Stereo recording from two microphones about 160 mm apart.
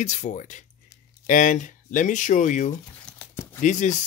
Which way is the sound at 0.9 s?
20° left (ahead or behind).